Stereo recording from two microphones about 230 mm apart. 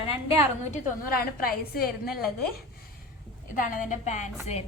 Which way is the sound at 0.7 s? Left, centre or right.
Left.